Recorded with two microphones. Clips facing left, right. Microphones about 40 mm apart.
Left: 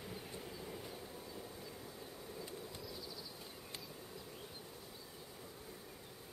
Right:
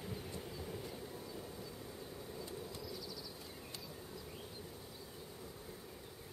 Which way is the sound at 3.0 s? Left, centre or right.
Centre.